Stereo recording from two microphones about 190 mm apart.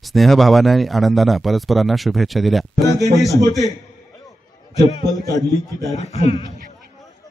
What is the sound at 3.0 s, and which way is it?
Speech, 15° right (ahead or behind).